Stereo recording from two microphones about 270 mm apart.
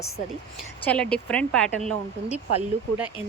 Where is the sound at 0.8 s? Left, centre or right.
Centre.